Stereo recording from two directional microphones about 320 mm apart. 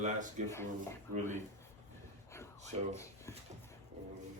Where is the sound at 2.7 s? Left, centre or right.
Centre.